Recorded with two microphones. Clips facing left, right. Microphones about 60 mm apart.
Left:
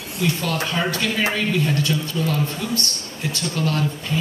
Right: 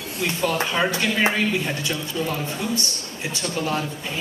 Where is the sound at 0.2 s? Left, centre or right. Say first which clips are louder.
Even; centre.